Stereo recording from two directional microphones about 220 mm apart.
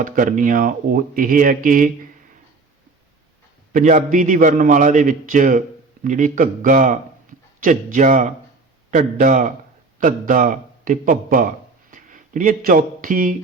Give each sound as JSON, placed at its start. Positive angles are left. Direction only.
{"t": 0.0, "sound": "speech", "side_deg": -35}
{"t": 3.7, "sound": "a man's voice", "side_deg": -35}
{"t": 11.9, "sound": "a sound", "side_deg": -35}